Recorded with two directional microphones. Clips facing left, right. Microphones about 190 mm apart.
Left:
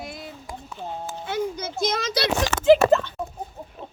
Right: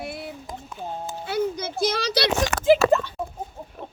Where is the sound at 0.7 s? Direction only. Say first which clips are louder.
Even; 10° right (ahead or behind).